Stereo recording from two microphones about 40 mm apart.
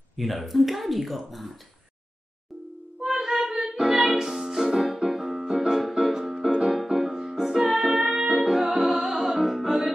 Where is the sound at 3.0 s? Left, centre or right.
Centre.